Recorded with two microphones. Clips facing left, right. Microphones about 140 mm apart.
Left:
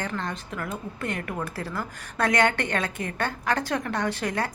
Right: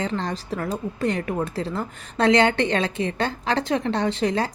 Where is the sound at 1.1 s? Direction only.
25° right (ahead or behind).